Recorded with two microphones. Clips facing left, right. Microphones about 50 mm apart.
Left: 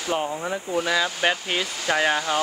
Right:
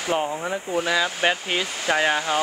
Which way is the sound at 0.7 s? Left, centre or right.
Centre.